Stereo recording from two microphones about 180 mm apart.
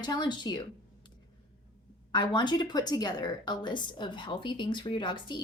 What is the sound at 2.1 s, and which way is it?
A woman's voice, 25° left (ahead or behind).